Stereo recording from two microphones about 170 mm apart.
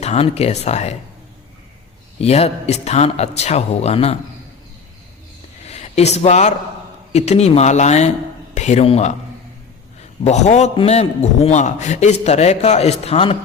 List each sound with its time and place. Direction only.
0.0 s a man's voice: 40° left (ahead or behind)
2.2 s a man's voice: 40° left (ahead or behind)
5.6 s a sound: 40° left (ahead or behind)
7.1 s a man's voice: 40° left (ahead or behind)
10.2 s a man's voice: 40° left (ahead or behind)